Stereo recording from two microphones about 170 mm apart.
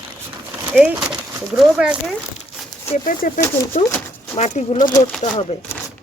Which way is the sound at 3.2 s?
50° left (ahead or behind).